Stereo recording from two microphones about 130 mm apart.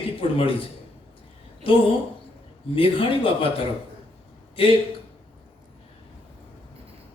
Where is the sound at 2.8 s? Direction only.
45° left (ahead or behind).